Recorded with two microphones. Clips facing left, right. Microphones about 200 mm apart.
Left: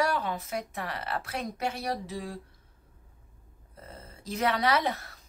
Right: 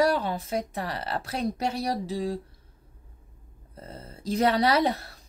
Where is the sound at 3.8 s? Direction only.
35° right (ahead or behind).